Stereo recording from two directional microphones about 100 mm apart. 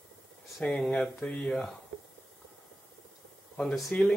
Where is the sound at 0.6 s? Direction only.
5° left (ahead or behind).